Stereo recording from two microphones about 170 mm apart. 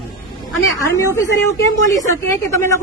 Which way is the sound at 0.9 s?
15° left (ahead or behind).